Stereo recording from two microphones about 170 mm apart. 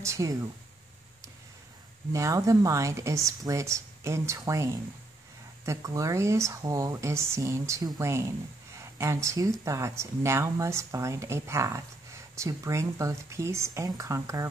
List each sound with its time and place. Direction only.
0.0 s speech: 15° right (ahead or behind)
2.1 s speech: 20° right (ahead or behind)